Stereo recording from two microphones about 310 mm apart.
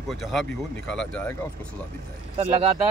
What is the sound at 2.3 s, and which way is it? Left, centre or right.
Speech, centre.